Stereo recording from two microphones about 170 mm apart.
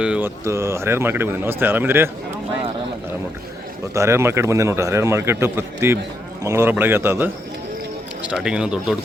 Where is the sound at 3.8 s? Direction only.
15° right (ahead or behind).